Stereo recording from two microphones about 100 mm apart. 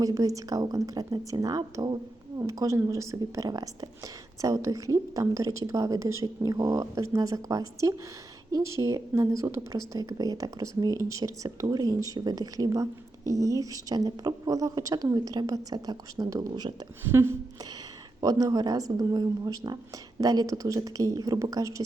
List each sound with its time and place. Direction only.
0.0 s a woman's voice: 35° right (ahead or behind)
17.0 s a sound: 25° right (ahead or behind)
18.2 s a woman's voice: 40° right (ahead or behind)